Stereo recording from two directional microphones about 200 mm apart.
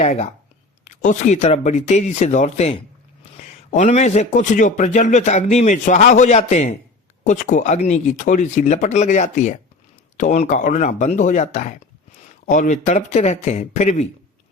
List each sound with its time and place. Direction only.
0.0 s a man's voice: 35° left (ahead or behind)